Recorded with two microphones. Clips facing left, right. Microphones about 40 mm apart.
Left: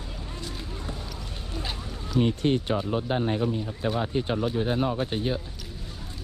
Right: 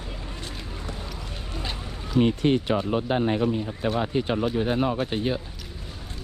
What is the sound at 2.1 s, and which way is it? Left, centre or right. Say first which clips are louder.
Speech: right 3 dB; right.